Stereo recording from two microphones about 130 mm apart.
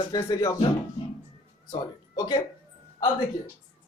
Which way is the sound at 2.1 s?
30° left (ahead or behind).